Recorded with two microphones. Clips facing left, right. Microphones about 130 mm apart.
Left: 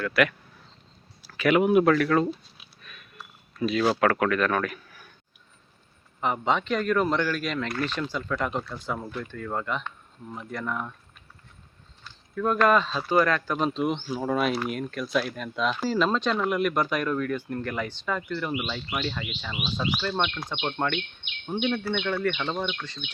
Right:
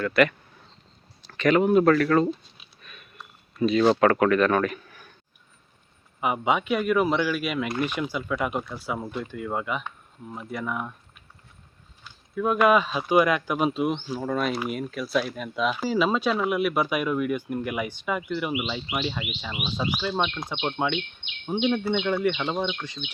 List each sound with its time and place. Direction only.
0.0 s speech: centre (ahead or behind)
1.9 s speech: centre (ahead or behind)
2.8 s a sound: centre (ahead or behind)
6.1 s speech: 10° right (ahead or behind)
12.0 s speech: 10° right (ahead or behind)